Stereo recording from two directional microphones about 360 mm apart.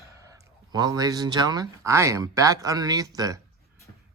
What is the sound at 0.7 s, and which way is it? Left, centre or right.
Speech, centre.